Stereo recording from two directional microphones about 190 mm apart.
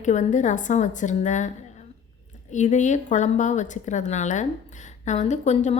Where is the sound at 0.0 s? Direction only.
40° left (ahead or behind).